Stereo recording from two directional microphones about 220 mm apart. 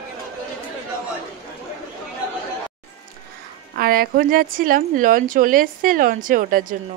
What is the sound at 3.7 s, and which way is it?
A woman's voice, 40° right (ahead or behind).